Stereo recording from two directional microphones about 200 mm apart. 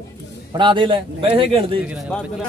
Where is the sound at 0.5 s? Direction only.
25° right (ahead or behind).